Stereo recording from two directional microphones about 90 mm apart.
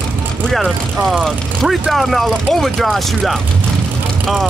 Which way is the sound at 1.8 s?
Centre (ahead or behind).